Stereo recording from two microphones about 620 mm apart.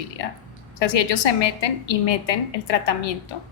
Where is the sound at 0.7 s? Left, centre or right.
Left.